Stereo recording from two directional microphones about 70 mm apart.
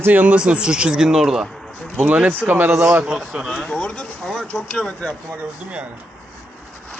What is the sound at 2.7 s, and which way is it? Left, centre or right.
Speech, centre.